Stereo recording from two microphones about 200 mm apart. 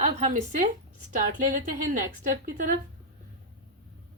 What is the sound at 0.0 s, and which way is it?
Speech, 40° right (ahead or behind).